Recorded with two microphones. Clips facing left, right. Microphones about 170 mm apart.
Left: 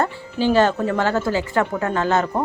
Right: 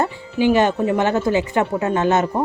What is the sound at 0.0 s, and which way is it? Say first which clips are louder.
A woman's voice: right 2 dB; 15° right (ahead or behind).